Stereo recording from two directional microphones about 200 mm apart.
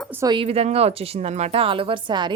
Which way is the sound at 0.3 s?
30° right (ahead or behind).